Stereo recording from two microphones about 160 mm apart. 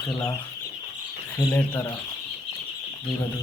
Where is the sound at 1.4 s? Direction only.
20° left (ahead or behind).